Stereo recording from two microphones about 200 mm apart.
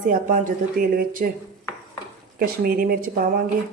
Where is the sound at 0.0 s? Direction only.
40° right (ahead or behind).